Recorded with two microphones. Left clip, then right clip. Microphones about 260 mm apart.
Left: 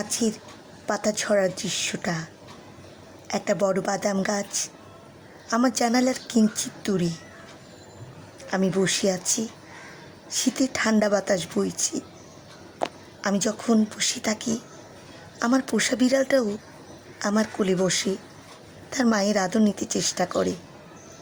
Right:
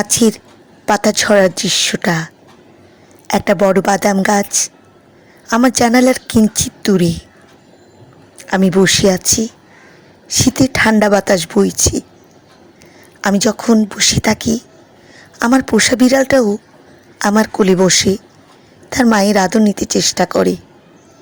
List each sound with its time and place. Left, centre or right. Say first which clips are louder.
0.0 s speech: right 13 dB; right
8.4 s speech: right 12 dB; right
13.2 s speech: right 11 dB; right